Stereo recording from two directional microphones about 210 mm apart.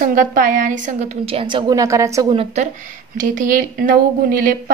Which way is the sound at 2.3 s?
35° right (ahead or behind).